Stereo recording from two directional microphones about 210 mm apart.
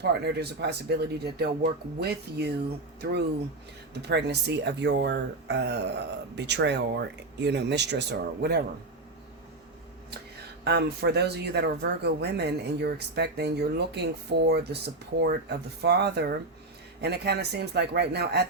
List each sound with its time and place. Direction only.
0.0 s speech: 50° right (ahead or behind)
10.6 s speech: 55° right (ahead or behind)